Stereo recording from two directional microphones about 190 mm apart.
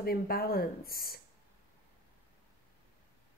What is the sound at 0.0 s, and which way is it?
Speech, 50° left (ahead or behind).